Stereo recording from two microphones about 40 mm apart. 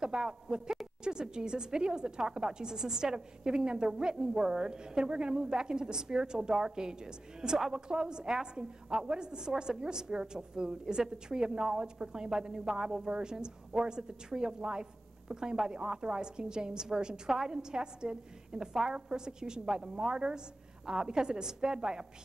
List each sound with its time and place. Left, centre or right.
0.0 s a woman's voice: right